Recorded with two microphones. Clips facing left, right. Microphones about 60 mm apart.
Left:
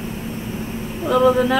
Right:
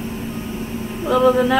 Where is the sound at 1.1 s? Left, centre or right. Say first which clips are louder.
Even; centre.